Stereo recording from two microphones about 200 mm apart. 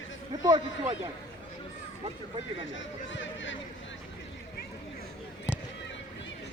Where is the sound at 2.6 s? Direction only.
70° left (ahead or behind).